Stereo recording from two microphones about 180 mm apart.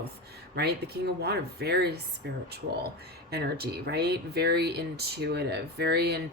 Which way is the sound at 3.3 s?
60° right (ahead or behind).